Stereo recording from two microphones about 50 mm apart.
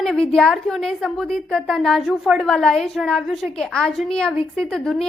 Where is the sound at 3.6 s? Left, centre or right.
Centre.